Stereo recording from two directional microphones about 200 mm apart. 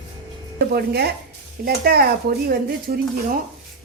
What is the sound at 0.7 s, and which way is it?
Speech, 50° right (ahead or behind).